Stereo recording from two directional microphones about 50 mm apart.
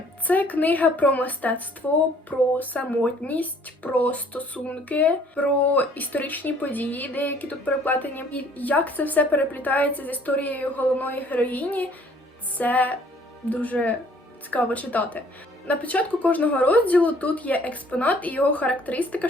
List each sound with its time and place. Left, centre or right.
0.3 s speech: left